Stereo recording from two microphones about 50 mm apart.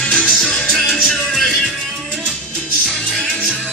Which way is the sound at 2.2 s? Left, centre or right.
Centre.